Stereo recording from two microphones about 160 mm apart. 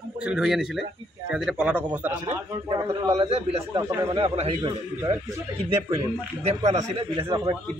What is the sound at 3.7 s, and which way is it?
Speech, 25° right (ahead or behind).